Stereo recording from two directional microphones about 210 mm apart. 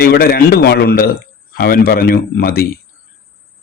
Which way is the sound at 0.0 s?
45° left (ahead or behind).